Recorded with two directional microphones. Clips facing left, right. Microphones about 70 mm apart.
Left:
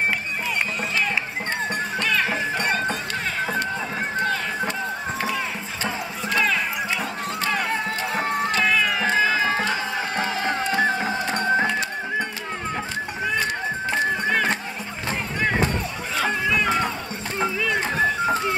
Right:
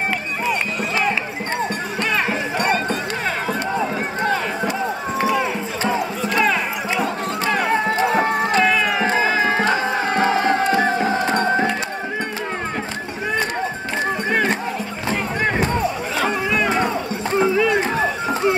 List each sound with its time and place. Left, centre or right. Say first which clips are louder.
0.5 s run: right 4 dB; centre
2.6 s run: right 7 dB; right
4.2 s run: right 4 dB; centre
6.3 s a sound: right 3 dB; centre
8.6 s run: right 3 dB; centre
9.6 s music: right 6 dB; right
16.4 s music: right 2 dB; right
17.6 s run: right 7 dB; centre